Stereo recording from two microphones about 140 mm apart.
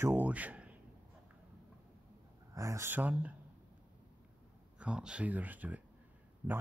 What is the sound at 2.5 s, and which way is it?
Speech, 20° right (ahead or behind).